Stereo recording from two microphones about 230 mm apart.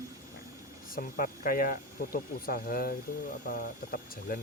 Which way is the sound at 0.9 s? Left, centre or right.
Left.